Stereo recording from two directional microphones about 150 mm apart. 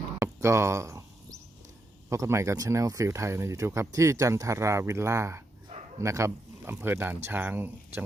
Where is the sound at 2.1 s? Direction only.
20° right (ahead or behind).